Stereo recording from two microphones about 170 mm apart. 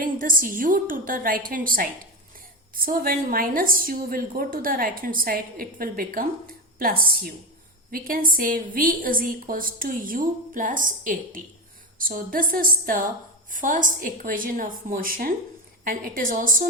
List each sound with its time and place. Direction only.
0.0 s a woman's voice: 55° right (ahead or behind)